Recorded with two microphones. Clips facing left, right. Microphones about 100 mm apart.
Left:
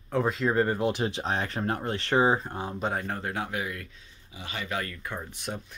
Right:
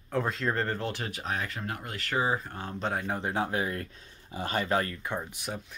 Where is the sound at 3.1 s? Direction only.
20° right (ahead or behind); by 4.9 s 35° right (ahead or behind).